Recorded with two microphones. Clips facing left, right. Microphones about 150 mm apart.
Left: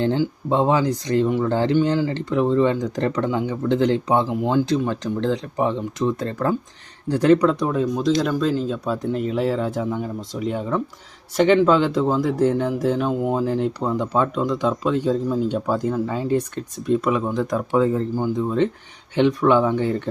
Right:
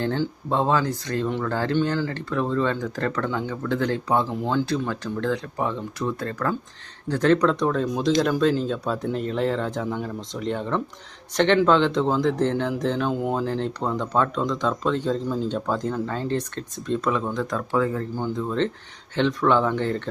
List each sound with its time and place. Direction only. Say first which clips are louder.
0.0 s speech: left 4 dB; 15° left (ahead or behind)